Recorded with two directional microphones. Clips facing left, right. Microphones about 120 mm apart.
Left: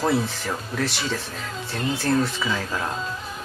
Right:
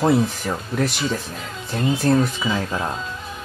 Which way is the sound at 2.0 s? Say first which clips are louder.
Right 3 dB; 20° right (ahead or behind).